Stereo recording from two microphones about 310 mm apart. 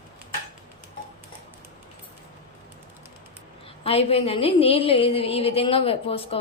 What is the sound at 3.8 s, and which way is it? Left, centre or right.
A woman's voice, centre.